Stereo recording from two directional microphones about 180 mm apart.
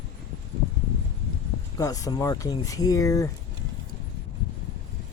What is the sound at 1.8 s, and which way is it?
Speech, 20° left (ahead or behind).